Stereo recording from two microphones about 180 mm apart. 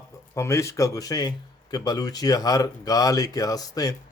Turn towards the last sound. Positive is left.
turn(degrees=20)  # may be behind; listen again after turning